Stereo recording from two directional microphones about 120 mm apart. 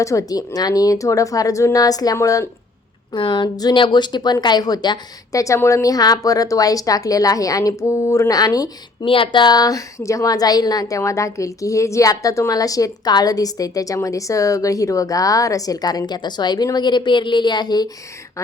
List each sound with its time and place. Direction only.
0.0 s a woman's voice: 25° left (ahead or behind)
3.1 s a woman's voice: 40° left (ahead or behind)
9.0 s a woman's voice: 45° left (ahead or behind)